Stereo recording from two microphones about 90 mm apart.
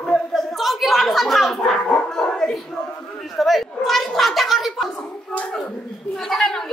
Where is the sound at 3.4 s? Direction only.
Centre (ahead or behind).